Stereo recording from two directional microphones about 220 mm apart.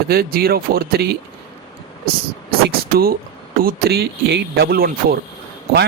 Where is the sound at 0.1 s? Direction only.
45° right (ahead or behind).